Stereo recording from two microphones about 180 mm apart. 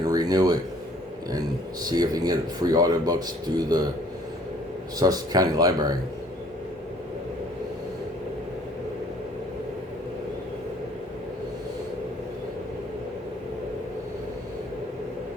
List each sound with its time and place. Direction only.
0.0 s a sound: 20° right (ahead or behind)
1.8 s speech: 20° right (ahead or behind)
4.9 s speech: 20° right (ahead or behind)